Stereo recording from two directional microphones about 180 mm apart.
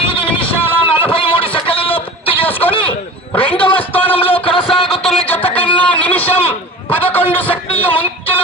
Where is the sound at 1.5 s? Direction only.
30° left (ahead or behind).